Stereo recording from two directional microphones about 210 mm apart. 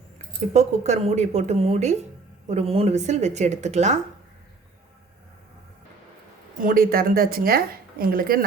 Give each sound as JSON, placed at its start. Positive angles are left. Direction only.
{"t": 0.5, "sound": "a woman's voice", "side_deg": -35}
{"t": 6.6, "sound": "a woman's voice", "side_deg": -40}